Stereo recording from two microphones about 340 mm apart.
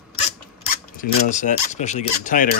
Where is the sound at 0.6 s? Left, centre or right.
Left.